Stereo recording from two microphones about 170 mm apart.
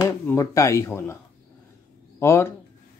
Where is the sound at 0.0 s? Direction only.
15° left (ahead or behind).